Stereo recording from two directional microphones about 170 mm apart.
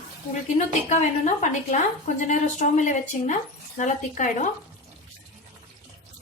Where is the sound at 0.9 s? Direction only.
45° left (ahead or behind).